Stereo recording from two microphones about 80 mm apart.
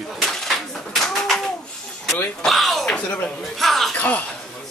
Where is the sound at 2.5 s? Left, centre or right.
Centre.